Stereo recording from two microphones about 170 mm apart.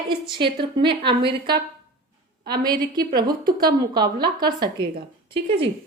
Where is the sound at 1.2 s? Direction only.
75° right (ahead or behind).